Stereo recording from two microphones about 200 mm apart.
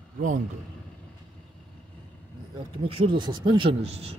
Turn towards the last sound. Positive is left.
turn(degrees=-30)  # may be behind; listen again after turning